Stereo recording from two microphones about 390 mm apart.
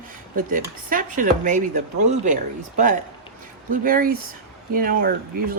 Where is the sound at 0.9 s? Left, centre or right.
Right.